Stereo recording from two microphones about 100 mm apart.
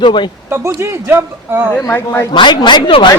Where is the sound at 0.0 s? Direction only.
50° left (ahead or behind).